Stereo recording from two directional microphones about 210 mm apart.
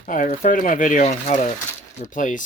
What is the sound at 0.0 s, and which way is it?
Speech, 40° left (ahead or behind).